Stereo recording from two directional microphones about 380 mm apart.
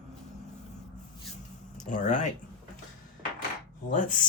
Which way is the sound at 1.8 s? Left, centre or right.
Centre.